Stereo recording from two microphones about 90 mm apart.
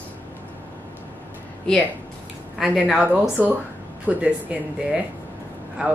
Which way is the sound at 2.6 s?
5° right (ahead or behind).